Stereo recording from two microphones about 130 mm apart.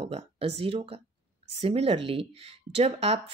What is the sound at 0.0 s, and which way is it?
Speech, 50° right (ahead or behind).